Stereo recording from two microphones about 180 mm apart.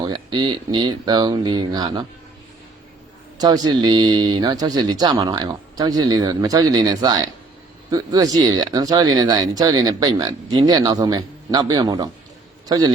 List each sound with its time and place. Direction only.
0.0 s speech: 25° right (ahead or behind)
3.3 s a man's voice: 20° right (ahead or behind)